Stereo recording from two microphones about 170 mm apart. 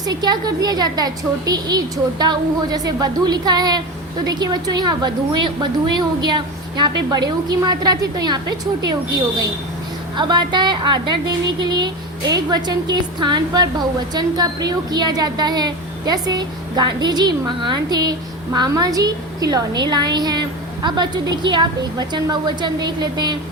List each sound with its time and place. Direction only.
0.0 s a woman's voice: 25° right (ahead or behind)
10.2 s a woman's voice: 25° right (ahead or behind)